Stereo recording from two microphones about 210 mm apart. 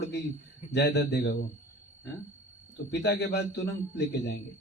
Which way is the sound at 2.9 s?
50° left (ahead or behind).